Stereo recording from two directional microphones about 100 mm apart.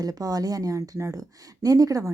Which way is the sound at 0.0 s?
40° right (ahead or behind).